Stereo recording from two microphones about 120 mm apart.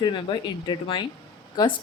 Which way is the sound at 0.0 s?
40° left (ahead or behind).